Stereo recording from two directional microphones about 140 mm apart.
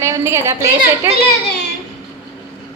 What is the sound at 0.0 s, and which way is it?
A woman's voice, 20° right (ahead or behind).